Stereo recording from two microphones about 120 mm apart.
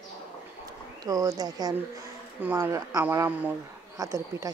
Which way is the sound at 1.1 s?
30° right (ahead or behind).